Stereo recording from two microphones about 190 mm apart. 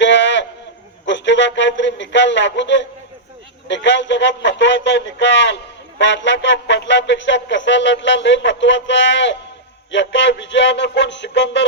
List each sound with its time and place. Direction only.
0.0 s sheep: 70° left (ahead or behind)
1.0 s music: 70° left (ahead or behind)